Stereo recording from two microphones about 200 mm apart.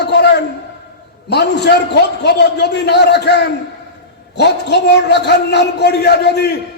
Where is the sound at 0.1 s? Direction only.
55° left (ahead or behind).